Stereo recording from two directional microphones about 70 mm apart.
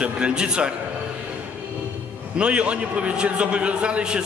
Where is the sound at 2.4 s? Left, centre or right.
Centre.